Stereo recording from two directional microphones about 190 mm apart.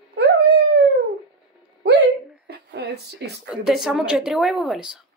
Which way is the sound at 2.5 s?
60° right (ahead or behind).